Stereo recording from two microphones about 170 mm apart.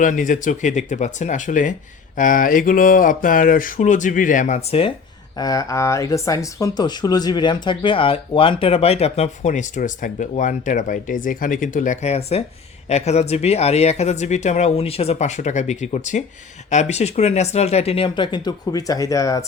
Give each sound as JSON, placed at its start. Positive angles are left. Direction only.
{"t": 0.0, "sound": "speech", "side_deg": 50}
{"t": 5.4, "sound": "speech", "side_deg": 20}